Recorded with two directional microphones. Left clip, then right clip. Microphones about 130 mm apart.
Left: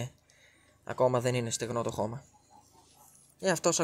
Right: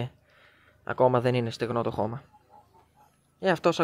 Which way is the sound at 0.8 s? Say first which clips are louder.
Right 5 dB; 25° right (ahead or behind).